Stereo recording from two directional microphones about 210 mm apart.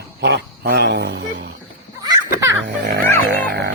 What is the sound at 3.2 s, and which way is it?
Music, 50° right (ahead or behind).